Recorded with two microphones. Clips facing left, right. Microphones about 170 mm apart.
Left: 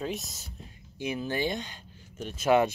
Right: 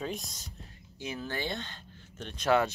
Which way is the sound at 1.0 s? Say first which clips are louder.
Left 6 dB; 15° left (ahead or behind).